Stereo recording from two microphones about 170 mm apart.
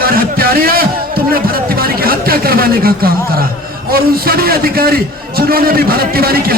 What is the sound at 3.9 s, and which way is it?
A man's voice, 60° right (ahead or behind).